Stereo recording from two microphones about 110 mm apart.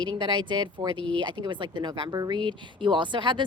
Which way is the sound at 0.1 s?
45° right (ahead or behind).